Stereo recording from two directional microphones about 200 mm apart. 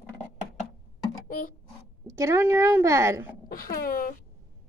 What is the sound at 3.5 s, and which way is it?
Speech, 45° left (ahead or behind).